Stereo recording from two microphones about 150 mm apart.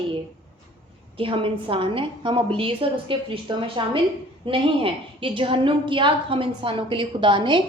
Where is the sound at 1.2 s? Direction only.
35° right (ahead or behind).